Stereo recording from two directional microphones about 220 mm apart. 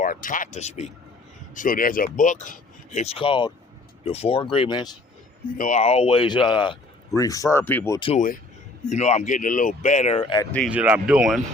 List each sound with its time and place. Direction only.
0.0 s speech: 40° left (ahead or behind); by 4.9 s 20° left (ahead or behind)
5.5 s speech: 35° left (ahead or behind); by 7.9 s 10° left (ahead or behind)
7.9 s speech: 25° left (ahead or behind)
10.7 s speech: 5° right (ahead or behind)